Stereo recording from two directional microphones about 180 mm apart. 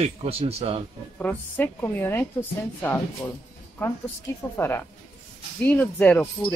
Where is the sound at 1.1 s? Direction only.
10° left (ahead or behind).